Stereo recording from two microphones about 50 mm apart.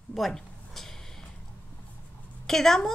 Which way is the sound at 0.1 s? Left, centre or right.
Centre.